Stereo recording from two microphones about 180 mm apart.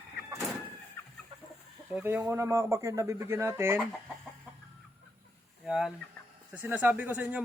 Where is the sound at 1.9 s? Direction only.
10° right (ahead or behind).